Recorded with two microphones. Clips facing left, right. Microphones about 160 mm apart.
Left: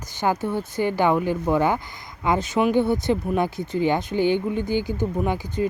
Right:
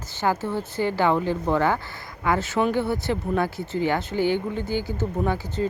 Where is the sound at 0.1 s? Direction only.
15° left (ahead or behind).